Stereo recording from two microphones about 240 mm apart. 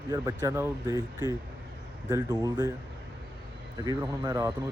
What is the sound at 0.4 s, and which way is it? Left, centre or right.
Speech, centre.